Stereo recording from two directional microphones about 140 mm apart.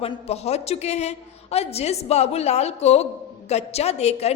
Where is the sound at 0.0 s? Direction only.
50° left (ahead or behind).